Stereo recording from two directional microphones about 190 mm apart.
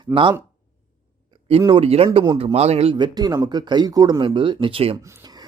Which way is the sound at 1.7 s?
30° right (ahead or behind).